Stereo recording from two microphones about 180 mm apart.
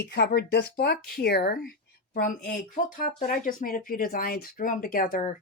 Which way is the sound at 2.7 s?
45° left (ahead or behind).